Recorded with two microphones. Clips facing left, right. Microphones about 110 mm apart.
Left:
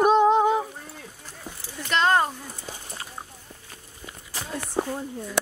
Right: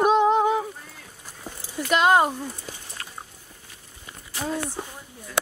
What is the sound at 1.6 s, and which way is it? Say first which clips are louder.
Speech: right 3 dB; 10° right (ahead or behind).